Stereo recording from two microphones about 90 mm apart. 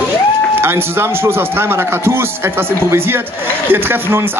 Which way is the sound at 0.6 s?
25° right (ahead or behind).